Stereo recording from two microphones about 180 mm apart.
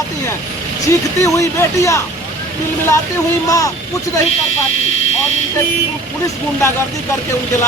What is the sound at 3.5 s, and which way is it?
Speech, 20° left (ahead or behind).